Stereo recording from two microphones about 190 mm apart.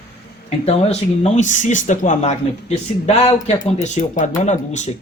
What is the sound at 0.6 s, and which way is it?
Speech, 35° left (ahead or behind).